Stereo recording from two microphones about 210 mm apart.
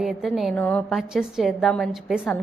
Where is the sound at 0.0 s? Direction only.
Centre (ahead or behind).